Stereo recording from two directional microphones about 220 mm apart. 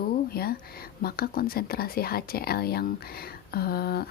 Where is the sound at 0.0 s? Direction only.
45° left (ahead or behind).